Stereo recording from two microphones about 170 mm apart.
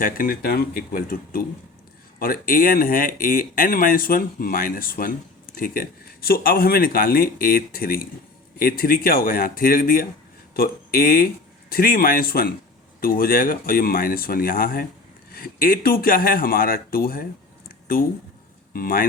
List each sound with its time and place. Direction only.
0.0 s speech: 60° left (ahead or behind)
18.7 s speech: 60° left (ahead or behind)